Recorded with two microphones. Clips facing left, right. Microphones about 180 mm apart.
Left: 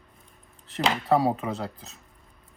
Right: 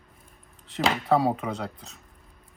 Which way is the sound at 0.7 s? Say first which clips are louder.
Even; centre (ahead or behind).